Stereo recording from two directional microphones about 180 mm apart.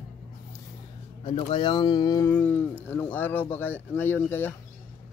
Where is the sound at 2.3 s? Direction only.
10° left (ahead or behind).